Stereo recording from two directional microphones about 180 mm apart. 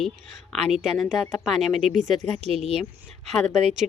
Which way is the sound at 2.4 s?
35° right (ahead or behind).